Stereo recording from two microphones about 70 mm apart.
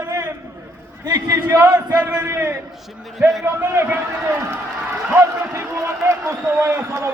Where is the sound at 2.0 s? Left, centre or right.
Right.